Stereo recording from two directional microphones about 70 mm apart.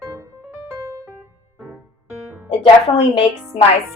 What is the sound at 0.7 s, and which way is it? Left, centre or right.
Music, right.